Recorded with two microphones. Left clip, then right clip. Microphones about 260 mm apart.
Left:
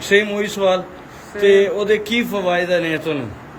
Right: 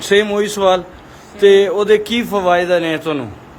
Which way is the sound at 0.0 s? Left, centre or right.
Centre.